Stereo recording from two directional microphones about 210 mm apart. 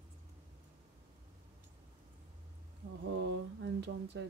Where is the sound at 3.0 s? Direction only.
55° right (ahead or behind).